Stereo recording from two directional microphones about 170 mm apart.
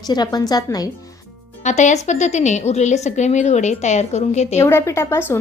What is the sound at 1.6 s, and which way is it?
A woman's voice, 45° left (ahead or behind).